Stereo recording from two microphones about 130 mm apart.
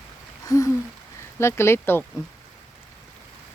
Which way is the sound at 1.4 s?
20° left (ahead or behind).